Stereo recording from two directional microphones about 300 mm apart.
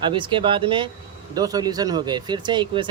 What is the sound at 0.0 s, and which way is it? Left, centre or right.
Speech, centre.